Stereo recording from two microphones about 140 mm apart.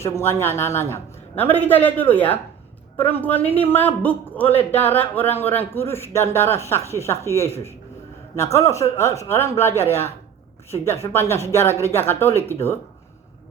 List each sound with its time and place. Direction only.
0.0 s a man's voice: 20° left (ahead or behind)
8.5 s a man's voice: 20° left (ahead or behind)
11.0 s speech: 15° left (ahead or behind)